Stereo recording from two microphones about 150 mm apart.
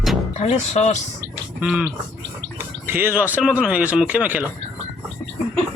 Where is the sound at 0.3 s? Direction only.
50° left (ahead or behind).